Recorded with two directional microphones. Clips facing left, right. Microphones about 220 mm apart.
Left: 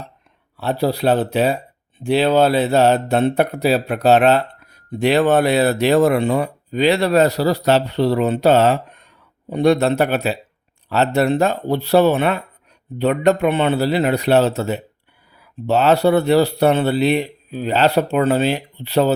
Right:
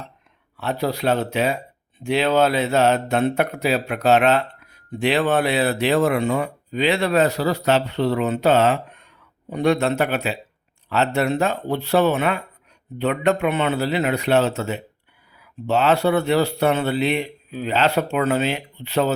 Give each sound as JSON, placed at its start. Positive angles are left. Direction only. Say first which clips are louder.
{"t": 0.5, "sound": "speech", "louder": "left 4 dB", "side_deg": 35}